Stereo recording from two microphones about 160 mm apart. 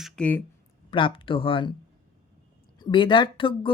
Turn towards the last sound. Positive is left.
turn(degrees=30)  # may be behind; listen again after turning